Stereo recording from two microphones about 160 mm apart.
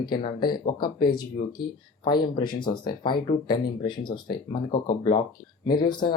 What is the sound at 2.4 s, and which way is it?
Speech, 30° left (ahead or behind).